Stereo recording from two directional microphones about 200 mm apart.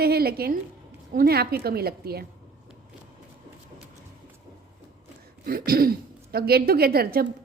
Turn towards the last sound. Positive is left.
turn(degrees=-50)  # may be behind; listen again after turning